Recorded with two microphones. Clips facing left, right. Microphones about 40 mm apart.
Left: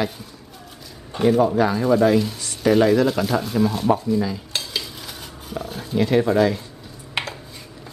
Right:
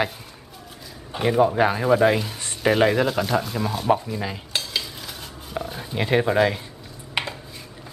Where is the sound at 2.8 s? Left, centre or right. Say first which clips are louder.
Left 3 dB; right.